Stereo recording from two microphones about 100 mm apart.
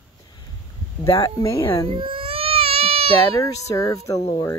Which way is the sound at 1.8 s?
65° right (ahead or behind).